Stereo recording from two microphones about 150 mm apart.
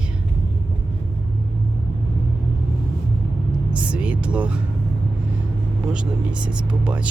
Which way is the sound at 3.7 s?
10° right (ahead or behind).